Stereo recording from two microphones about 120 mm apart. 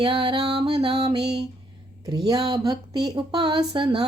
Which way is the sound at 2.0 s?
35° right (ahead or behind).